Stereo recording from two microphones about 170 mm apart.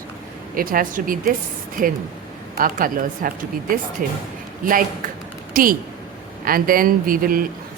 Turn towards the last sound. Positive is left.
turn(degrees=-55)  # may be behind; listen again after turning